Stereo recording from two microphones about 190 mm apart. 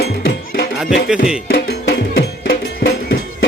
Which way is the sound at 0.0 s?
55° left (ahead or behind).